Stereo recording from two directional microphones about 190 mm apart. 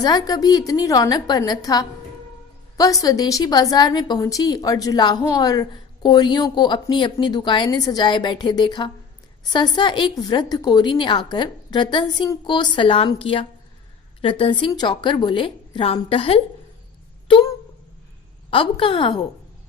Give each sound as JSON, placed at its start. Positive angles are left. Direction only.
{"t": 0.0, "sound": "a woman's voice", "side_deg": 20}
{"t": 18.5, "sound": "a woman's voice", "side_deg": 25}